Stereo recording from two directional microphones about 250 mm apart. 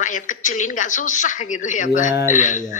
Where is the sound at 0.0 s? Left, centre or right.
Left.